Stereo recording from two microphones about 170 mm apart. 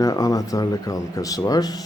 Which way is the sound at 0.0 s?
20° left (ahead or behind).